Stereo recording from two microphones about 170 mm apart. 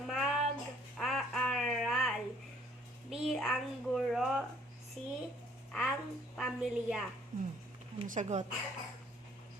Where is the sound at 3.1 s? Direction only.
Centre (ahead or behind).